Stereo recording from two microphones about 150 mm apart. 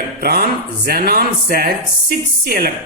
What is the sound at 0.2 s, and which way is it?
Speech, 90° right.